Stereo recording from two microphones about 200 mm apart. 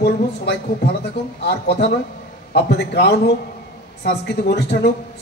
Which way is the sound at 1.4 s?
55° left (ahead or behind).